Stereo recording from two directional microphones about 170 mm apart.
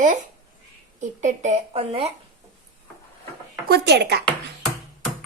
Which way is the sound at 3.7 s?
75° right (ahead or behind).